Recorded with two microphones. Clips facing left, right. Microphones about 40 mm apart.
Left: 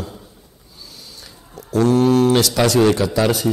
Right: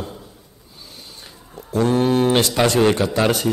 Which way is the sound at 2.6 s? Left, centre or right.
Right.